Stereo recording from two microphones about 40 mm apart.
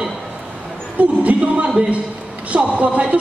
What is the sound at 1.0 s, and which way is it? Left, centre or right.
Music, right.